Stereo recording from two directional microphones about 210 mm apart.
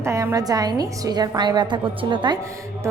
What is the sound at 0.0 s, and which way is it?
A woman's voice, 15° right (ahead or behind).